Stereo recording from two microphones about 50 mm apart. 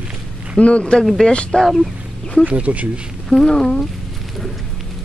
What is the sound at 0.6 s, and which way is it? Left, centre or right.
Speech, left.